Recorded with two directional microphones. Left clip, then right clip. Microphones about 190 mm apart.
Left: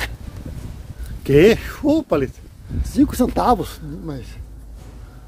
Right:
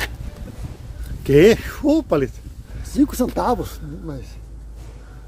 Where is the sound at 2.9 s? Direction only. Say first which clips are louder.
Left 1 dB; 15° left (ahead or behind).